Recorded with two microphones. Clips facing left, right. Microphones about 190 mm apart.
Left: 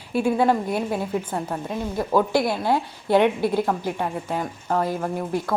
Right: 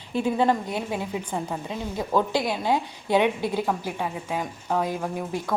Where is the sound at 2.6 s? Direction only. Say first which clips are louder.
Left 2 dB; 15° right (ahead or behind).